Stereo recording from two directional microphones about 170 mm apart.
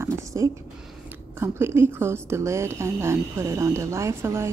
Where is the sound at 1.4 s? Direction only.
15° right (ahead or behind).